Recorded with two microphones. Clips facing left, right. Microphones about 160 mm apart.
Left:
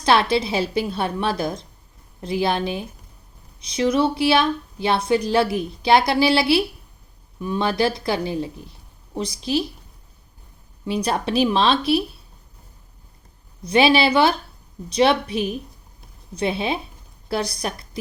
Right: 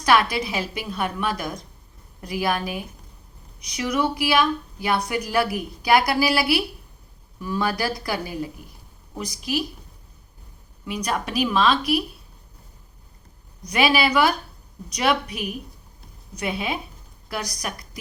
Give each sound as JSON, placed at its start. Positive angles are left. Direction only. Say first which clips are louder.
{"t": 0.0, "sound": "speech", "louder": "left 2 dB", "side_deg": 30}
{"t": 10.8, "sound": "speech", "louder": "left 4 dB", "side_deg": 30}
{"t": 13.7, "sound": "speech", "louder": "left 4 dB", "side_deg": 30}